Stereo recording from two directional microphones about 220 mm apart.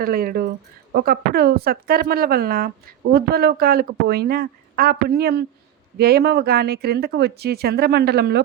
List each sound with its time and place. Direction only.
0.0 s a woman's voice: 40° right (ahead or behind)